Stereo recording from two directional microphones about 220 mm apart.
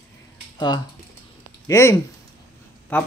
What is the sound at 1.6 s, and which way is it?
Speech, 15° left (ahead or behind).